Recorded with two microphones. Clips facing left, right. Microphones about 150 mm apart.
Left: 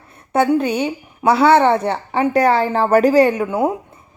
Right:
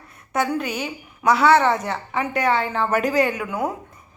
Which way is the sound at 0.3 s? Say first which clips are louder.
Left 8 dB; 30° left (ahead or behind).